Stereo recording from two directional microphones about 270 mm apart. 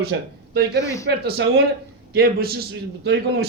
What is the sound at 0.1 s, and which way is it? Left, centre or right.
A man's voice, right.